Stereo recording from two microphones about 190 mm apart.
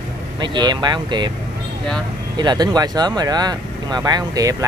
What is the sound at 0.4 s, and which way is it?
Speech, 25° right (ahead or behind).